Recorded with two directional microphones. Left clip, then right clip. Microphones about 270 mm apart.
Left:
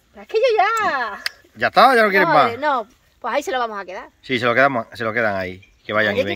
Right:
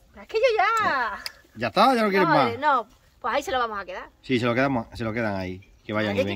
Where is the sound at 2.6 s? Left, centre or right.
Centre.